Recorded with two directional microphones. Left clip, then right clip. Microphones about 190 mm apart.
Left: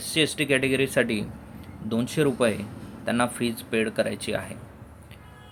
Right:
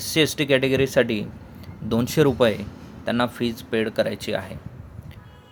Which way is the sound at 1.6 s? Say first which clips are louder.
Right 4 dB; 30° right (ahead or behind).